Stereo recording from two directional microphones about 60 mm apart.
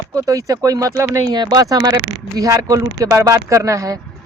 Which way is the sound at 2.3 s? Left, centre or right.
Right.